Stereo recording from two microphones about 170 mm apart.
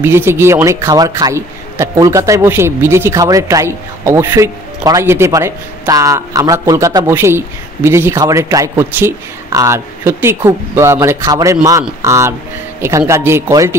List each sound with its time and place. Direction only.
0.0 s a man's voice: 15° right (ahead or behind)